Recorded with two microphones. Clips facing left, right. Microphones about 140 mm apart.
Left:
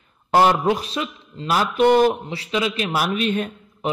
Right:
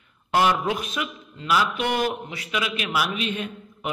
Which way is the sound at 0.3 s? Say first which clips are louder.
Left 5 dB; 35° left (ahead or behind).